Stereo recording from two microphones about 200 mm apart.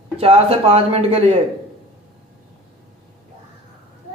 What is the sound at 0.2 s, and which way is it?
Speech, 30° right (ahead or behind).